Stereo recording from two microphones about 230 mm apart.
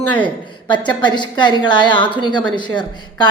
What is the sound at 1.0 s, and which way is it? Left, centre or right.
A woman's voice, centre.